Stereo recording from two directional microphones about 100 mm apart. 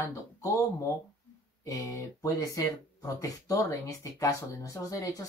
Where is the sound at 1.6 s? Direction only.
35° left (ahead or behind).